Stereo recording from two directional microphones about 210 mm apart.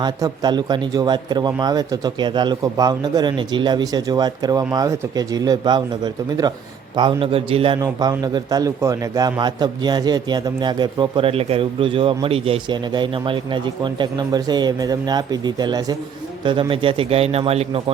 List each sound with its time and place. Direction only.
0.0 s a man's voice: 20° right (ahead or behind)
6.9 s a man's voice: 25° right (ahead or behind)